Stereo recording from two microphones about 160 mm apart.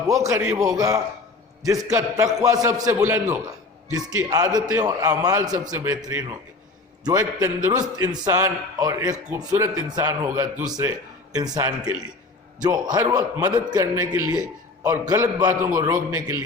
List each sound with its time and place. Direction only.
0.1 s a man's voice: 20° right (ahead or behind)